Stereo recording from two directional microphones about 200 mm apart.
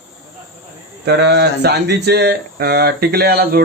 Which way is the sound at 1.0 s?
55° right (ahead or behind).